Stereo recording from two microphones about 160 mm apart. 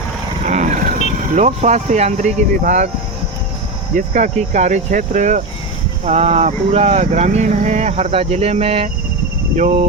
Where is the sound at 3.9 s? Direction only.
50° right (ahead or behind).